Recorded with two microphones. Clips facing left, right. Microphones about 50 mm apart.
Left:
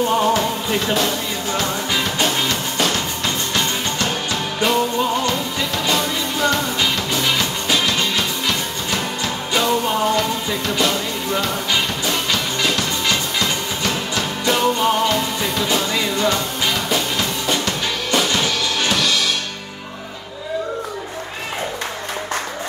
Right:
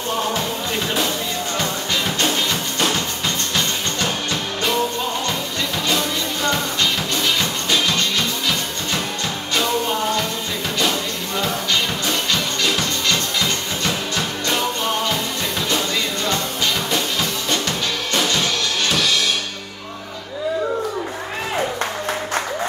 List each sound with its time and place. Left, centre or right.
4.6 s music: centre
11.3 s music: centre
13.0 s music: centre